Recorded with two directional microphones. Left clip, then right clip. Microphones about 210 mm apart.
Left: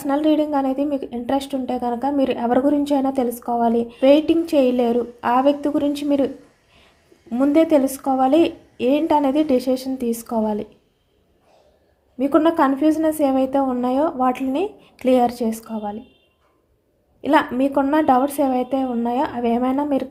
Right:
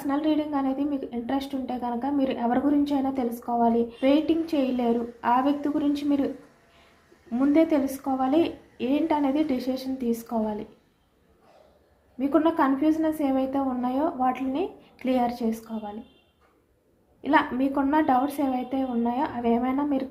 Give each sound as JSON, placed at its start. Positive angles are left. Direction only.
{"t": 0.0, "sound": "a woman's voice", "side_deg": 50}
{"t": 12.2, "sound": "a woman's voice", "side_deg": 50}
{"t": 17.2, "sound": "a woman's voice", "side_deg": 50}